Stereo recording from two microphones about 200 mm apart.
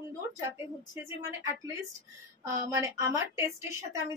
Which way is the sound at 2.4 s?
15° right (ahead or behind).